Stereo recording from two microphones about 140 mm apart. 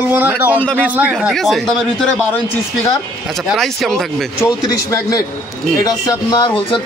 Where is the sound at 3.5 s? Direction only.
Centre (ahead or behind).